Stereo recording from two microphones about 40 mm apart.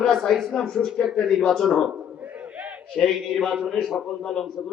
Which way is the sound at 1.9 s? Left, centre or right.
Right.